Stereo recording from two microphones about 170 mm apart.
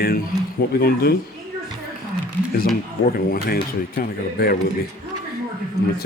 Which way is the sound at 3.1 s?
60° left (ahead or behind).